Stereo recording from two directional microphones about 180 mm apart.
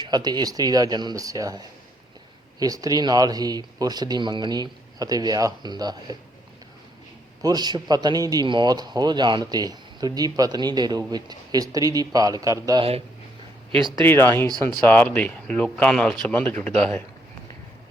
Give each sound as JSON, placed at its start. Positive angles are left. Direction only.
{"t": 0.0, "sound": "a man's voice", "side_deg": -25}
{"t": 7.4, "sound": "a man's voice", "side_deg": -25}
{"t": 14.0, "sound": "speech", "side_deg": 10}
{"t": 14.4, "sound": "a man's voice", "side_deg": -20}
{"t": 14.8, "sound": "speech", "side_deg": 10}